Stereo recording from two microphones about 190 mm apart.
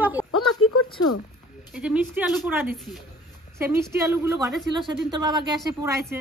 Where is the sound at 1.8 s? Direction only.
5° right (ahead or behind).